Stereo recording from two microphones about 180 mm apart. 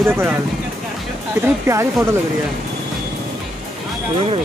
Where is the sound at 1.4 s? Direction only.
15° right (ahead or behind).